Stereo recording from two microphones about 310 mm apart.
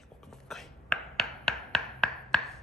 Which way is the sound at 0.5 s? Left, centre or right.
Centre.